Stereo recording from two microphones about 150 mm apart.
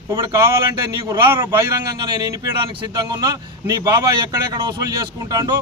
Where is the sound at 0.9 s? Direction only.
25° right (ahead or behind).